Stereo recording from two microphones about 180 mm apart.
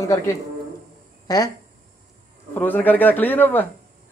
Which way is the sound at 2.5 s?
10° left (ahead or behind).